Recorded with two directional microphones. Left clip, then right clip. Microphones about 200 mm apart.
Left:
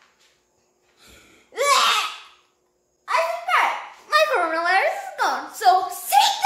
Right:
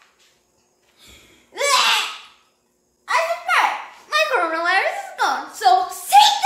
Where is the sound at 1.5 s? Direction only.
40° left (ahead or behind).